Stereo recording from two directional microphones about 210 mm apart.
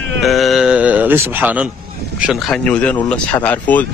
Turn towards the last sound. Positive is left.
turn(degrees=5)  # may be behind; listen again after turning